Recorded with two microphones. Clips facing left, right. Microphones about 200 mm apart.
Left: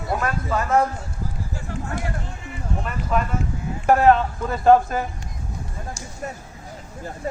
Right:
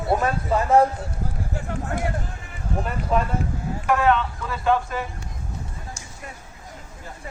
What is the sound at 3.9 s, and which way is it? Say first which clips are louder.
Speech: left 4 dB; 40° left (ahead or behind).